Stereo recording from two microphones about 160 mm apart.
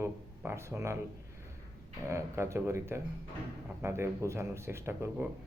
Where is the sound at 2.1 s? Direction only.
15° right (ahead or behind).